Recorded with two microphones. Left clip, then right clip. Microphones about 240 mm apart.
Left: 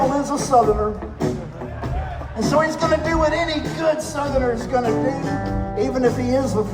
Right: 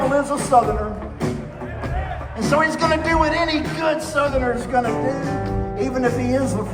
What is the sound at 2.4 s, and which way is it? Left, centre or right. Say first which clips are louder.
Speech: even; left.